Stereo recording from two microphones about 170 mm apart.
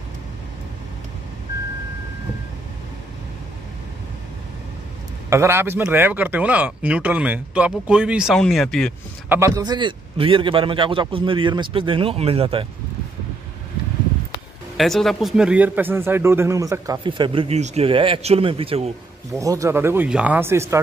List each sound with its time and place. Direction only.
5.3 s speech: 15° right (ahead or behind); by 8.9 s 5° left (ahead or behind)
9.3 s a man's voice: 20° right (ahead or behind); by 12.6 s 35° right (ahead or behind)
14.8 s speech: centre (ahead or behind); by 18.9 s 35° right (ahead or behind)
19.3 s speech: 20° right (ahead or behind)